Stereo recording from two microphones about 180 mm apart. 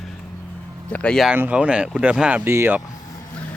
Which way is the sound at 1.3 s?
10° right (ahead or behind).